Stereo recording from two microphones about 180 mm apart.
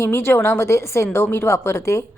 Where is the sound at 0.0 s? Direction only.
15° left (ahead or behind).